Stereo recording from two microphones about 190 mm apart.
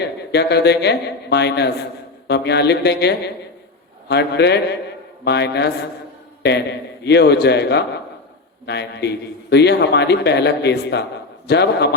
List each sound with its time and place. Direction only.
0.0 s a man's voice: 60° left (ahead or behind)